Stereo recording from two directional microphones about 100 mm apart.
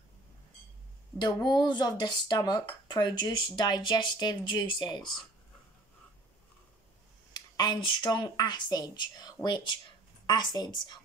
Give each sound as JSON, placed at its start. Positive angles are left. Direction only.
{"t": 1.1, "sound": "speech", "side_deg": 45}
{"t": 7.3, "sound": "speech", "side_deg": 45}